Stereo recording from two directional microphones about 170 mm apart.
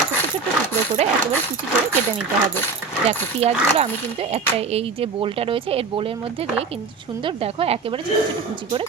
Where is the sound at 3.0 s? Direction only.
40° right (ahead or behind).